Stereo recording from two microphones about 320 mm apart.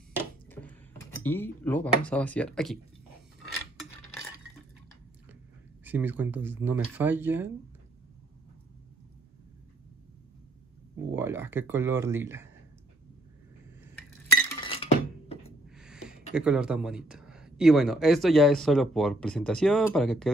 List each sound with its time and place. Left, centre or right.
0.5 s speech: centre
5.9 s speech: centre
11.1 s speech: centre
14.3 s chink: centre
15.7 s speech: centre